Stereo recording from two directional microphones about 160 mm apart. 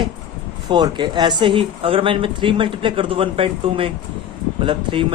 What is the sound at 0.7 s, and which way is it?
Speech, 30° right (ahead or behind).